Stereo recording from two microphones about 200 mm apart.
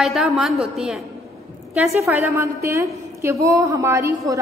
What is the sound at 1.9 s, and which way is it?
A woman's voice, 15° right (ahead or behind).